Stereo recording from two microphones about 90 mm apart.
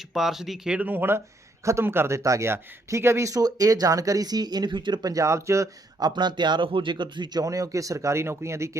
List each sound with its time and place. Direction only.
0.1 s speech: 5° right (ahead or behind); by 5.1 s 55° right (ahead or behind)
5.1 s speech: 35° right (ahead or behind)
6.0 s a man's voice: 55° right (ahead or behind)
7.4 s speech: 40° right (ahead or behind)